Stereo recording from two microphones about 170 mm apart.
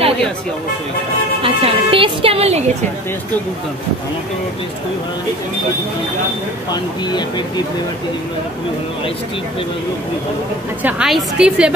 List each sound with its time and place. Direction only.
1.4 s a woman's voice: 35° right (ahead or behind)
6.7 s speech: 25° left (ahead or behind)
10.8 s a woman's voice: 5° right (ahead or behind)